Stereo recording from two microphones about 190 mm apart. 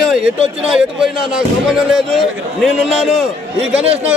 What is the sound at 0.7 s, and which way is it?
A man's voice, 5° right (ahead or behind).